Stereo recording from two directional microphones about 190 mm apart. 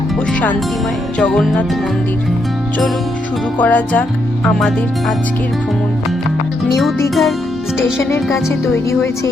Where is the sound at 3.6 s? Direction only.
10° left (ahead or behind).